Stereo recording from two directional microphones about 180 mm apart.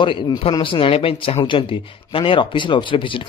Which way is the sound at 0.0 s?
30° left (ahead or behind).